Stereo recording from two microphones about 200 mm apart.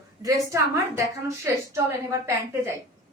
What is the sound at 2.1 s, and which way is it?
Speech, 15° right (ahead or behind).